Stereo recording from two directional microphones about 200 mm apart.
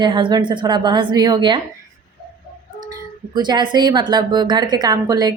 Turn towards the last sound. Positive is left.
turn(degrees=-20)  # may be behind; listen again after turning